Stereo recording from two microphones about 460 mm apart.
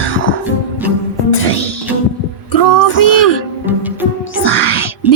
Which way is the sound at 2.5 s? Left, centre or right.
Left.